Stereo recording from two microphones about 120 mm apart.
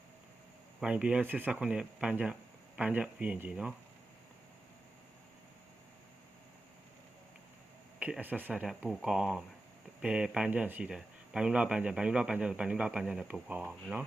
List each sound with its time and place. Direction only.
0.8 s speech: 10° right (ahead or behind)
7.9 s speech: 10° right (ahead or behind)